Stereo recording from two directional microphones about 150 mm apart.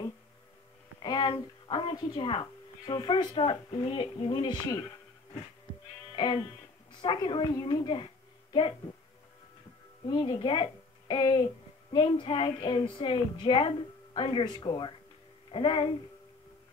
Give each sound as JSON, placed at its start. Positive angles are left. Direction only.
{"t": 0.9, "sound": "a woman's voice", "side_deg": 30}
{"t": 6.1, "sound": "music", "side_deg": 30}
{"t": 6.9, "sound": "a woman's voice", "side_deg": 30}
{"t": 10.0, "sound": "a woman's voice", "side_deg": 30}